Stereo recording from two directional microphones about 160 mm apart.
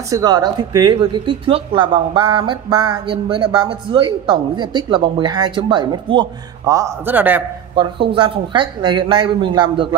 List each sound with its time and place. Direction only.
0.1 s speech: 25° right (ahead or behind)
7.7 s speech: 30° right (ahead or behind)